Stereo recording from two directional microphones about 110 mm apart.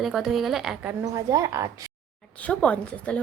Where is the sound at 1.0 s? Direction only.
30° right (ahead or behind).